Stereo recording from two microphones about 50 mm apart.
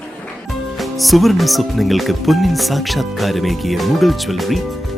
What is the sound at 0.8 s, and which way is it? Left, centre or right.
Speech, centre.